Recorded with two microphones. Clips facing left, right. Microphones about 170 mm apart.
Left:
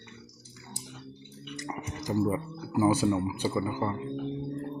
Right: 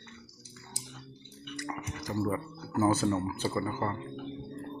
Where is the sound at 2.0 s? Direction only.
20° left (ahead or behind).